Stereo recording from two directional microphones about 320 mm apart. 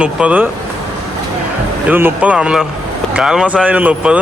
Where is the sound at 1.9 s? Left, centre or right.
Centre.